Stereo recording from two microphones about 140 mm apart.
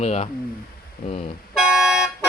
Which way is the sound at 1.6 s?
5° right (ahead or behind).